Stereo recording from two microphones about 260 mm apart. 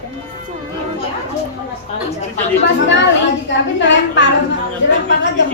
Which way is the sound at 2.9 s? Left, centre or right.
Left.